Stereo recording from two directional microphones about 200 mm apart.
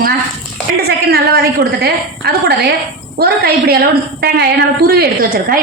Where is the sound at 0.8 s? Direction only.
55° right (ahead or behind).